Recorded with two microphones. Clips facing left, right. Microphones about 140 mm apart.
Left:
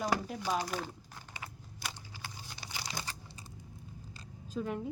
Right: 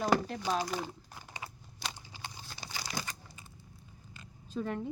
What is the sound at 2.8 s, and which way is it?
Crumpling, 30° left (ahead or behind).